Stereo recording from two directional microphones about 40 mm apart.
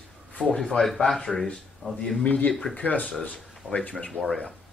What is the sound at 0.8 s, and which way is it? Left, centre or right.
Speech, centre.